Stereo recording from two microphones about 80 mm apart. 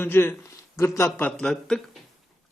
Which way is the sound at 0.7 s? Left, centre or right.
Left.